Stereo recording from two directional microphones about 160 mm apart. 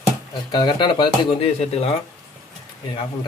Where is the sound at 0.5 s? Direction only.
30° left (ahead or behind).